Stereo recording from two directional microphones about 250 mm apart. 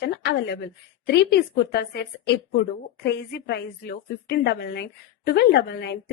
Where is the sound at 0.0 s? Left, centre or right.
Left.